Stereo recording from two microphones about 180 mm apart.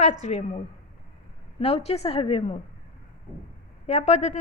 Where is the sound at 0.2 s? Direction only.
40° left (ahead or behind).